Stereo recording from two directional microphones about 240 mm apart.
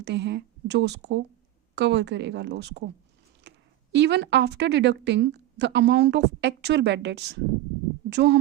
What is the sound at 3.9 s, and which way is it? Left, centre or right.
A woman's voice, right.